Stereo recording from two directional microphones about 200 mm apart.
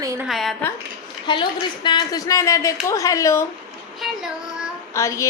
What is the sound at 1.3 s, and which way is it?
A woman's voice, 25° left (ahead or behind).